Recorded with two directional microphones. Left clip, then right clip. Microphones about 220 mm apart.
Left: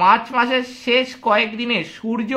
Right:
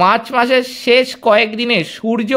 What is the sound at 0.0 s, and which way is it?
A man's voice, 40° right (ahead or behind).